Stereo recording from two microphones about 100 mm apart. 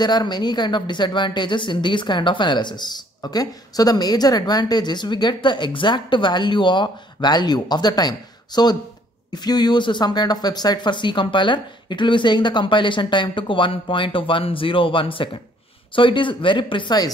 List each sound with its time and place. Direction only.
0.0 s speech: 45° left (ahead or behind)